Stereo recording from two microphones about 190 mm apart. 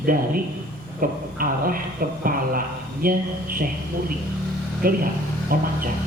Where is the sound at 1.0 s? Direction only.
50° right (ahead or behind).